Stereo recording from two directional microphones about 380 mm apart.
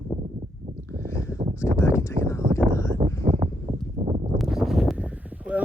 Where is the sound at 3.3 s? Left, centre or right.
Centre.